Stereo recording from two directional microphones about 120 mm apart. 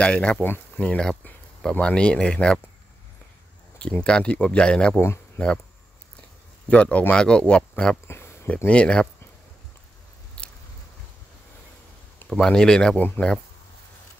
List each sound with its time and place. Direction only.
0.0 s speech: 10° left (ahead or behind)
3.7 s speech: 10° left (ahead or behind)
6.7 s speech: 10° left (ahead or behind)
8.1 s a sound: 20° left (ahead or behind)
8.6 s speech: 10° left (ahead or behind)
10.4 s biting: 10° left (ahead or behind)
12.3 s speech: 5° left (ahead or behind)